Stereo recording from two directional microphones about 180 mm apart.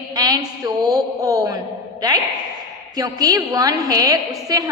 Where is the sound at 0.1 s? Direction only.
20° right (ahead or behind).